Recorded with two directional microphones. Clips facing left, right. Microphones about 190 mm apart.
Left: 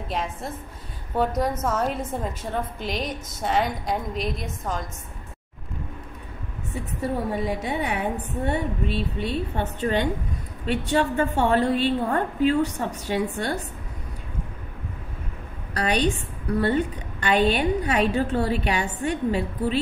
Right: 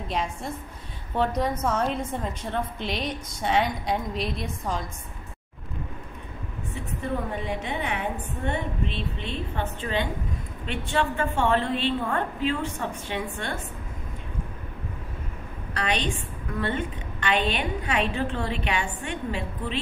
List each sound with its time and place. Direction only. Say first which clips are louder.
0.1 s a woman's voice: even; centre (ahead or behind)
6.7 s a woman's voice: left 3 dB; 40° left (ahead or behind)
8.8 s a woman's voice: left 5 dB; 10° left (ahead or behind)
9.8 s a woman's voice: left 6 dB; 40° left (ahead or behind)
15.7 s a woman's voice: left 5 dB; 40° left (ahead or behind)